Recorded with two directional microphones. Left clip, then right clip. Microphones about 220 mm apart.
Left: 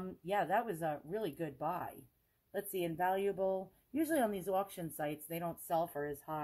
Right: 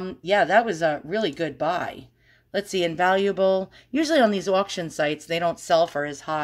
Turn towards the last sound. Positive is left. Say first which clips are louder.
# right 14 dB
turn(degrees=-25)  # may be behind; listen again after turning